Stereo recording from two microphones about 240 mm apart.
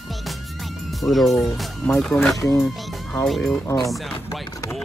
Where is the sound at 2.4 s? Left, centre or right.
Centre.